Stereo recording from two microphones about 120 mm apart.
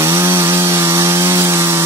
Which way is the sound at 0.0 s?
25° right (ahead or behind).